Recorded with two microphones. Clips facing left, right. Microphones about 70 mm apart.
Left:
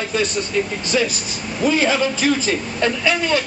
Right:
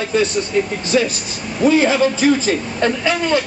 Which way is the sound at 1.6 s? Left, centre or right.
Right.